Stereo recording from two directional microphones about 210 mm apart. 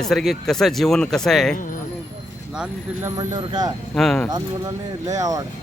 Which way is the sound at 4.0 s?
Centre (ahead or behind).